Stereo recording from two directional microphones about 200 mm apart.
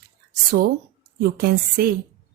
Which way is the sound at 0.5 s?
50° right (ahead or behind).